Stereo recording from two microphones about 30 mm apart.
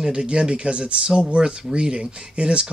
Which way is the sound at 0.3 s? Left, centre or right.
Right.